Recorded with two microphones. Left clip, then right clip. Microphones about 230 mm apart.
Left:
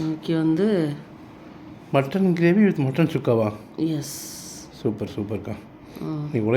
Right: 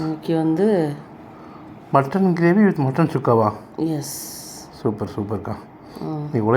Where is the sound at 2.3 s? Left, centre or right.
Centre.